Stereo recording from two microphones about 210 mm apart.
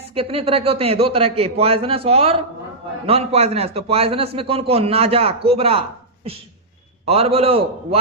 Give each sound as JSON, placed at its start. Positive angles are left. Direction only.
{"t": 0.1, "sound": "a man's voice", "side_deg": -25}
{"t": 7.0, "sound": "a man's voice", "side_deg": -30}